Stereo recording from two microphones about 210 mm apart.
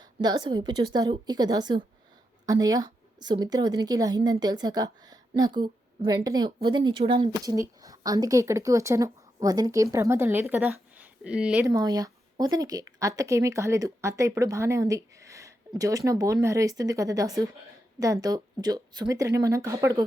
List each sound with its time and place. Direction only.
0.0 s a woman's voice: 20° right (ahead or behind); by 11.7 s 5° right (ahead or behind)
11.7 s a woman's voice: 15° right (ahead or behind)